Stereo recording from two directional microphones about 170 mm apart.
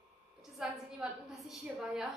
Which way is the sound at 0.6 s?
5° right (ahead or behind).